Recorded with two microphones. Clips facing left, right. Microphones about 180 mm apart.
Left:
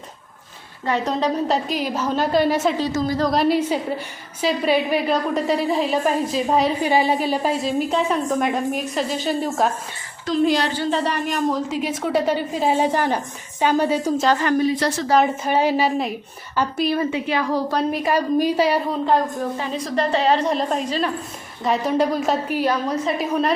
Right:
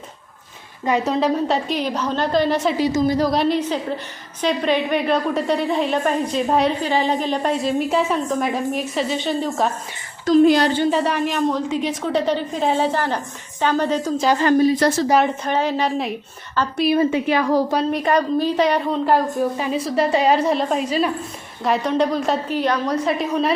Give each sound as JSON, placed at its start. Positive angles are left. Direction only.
{"t": 0.9, "sound": "a woman's voice", "side_deg": -10}
{"t": 2.7, "sound": "a woman's voice", "side_deg": -10}
{"t": 3.2, "sound": "a woman's voice", "side_deg": 0}
{"t": 10.2, "sound": "a woman's voice", "side_deg": -50}
{"t": 10.9, "sound": "a woman's voice", "side_deg": -5}
{"t": 14.3, "sound": "a woman's voice", "side_deg": -25}
{"t": 14.6, "sound": "a woman's voice", "side_deg": -45}
{"t": 15.4, "sound": "a woman's voice", "side_deg": 10}
{"t": 17.1, "sound": "a woman's voice", "side_deg": -50}
{"t": 17.9, "sound": "a woman's voice", "side_deg": 5}
{"t": 19.0, "sound": "a woman's voice", "side_deg": -10}